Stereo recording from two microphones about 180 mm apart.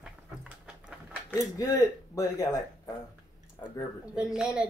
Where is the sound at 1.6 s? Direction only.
20° left (ahead or behind).